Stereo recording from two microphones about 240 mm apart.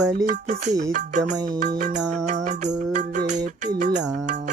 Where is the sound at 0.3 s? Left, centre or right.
Right.